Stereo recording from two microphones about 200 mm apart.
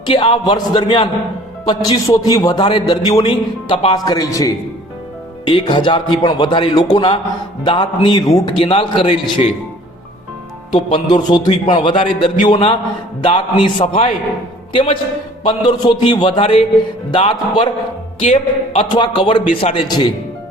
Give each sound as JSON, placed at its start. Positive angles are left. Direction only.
{"t": 0.0, "sound": "a man's voice", "side_deg": 25}
{"t": 10.8, "sound": "a man's voice", "side_deg": 35}
{"t": 18.2, "sound": "speech", "side_deg": 40}
{"t": 18.9, "sound": "a man's voice", "side_deg": 25}